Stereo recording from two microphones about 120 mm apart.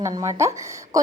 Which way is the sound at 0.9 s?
30° right (ahead or behind).